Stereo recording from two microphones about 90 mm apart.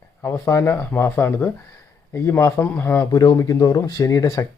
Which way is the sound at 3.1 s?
40° left (ahead or behind).